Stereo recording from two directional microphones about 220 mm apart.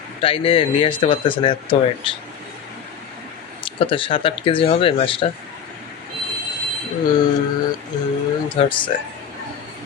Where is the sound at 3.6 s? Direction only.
25° left (ahead or behind).